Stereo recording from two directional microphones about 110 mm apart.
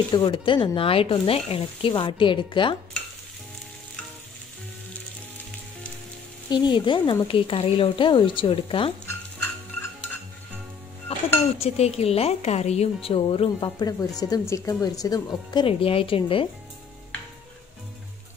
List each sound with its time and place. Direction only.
0.1 s speech: 45° left (ahead or behind)
6.5 s speech: 45° left (ahead or behind)
9.0 s a sound: 20° left (ahead or behind)
11.6 s a woman's voice: 70° left (ahead or behind)
13.6 s speech: 40° left (ahead or behind)
15.6 s speech: 55° left (ahead or behind)